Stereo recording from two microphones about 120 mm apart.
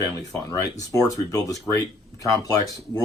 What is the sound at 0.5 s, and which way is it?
Speech, 30° left (ahead or behind).